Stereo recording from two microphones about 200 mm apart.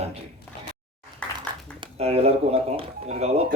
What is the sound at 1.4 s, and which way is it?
Speech, 25° right (ahead or behind).